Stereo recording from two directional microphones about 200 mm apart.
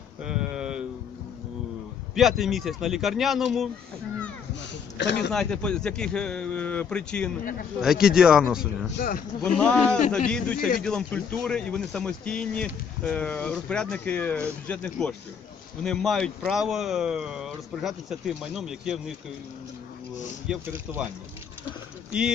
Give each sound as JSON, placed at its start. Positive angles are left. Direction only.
{"t": 0.2, "sound": "a sound", "side_deg": -5}
{"t": 2.1, "sound": "speech", "side_deg": 0}
{"t": 4.7, "sound": "a sound", "side_deg": 60}
{"t": 5.3, "sound": "speech", "side_deg": 5}
{"t": 9.0, "sound": "speech", "side_deg": 45}
{"t": 9.4, "sound": "speech", "side_deg": 5}
{"t": 20.5, "sound": "speech", "side_deg": -10}